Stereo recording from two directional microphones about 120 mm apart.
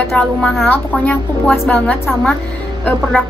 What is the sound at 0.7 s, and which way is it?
A woman's voice, 15° left (ahead or behind).